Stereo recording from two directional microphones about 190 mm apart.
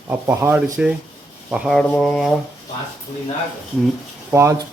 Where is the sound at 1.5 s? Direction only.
5° right (ahead or behind).